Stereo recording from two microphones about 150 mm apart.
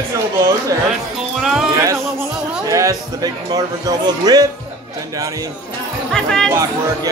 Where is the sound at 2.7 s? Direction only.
20° right (ahead or behind).